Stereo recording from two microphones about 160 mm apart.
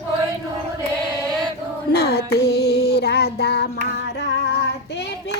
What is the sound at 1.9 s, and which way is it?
Child singing, 85° left.